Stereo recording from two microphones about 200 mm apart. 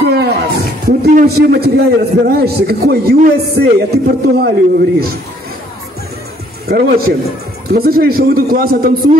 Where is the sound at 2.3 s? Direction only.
50° right (ahead or behind).